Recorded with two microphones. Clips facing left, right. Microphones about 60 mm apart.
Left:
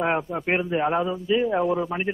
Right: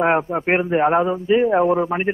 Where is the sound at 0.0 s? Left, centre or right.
Right.